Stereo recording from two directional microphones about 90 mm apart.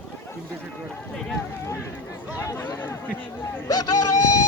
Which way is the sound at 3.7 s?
45° left (ahead or behind).